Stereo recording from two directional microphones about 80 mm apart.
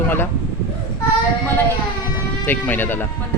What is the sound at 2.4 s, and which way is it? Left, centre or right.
Speech, left.